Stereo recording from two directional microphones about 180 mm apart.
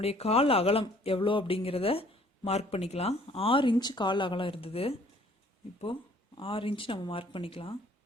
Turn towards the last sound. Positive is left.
turn(degrees=30)  # may be behind; listen again after turning